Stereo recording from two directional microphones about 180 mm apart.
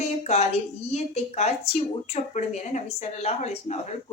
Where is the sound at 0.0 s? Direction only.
40° left (ahead or behind).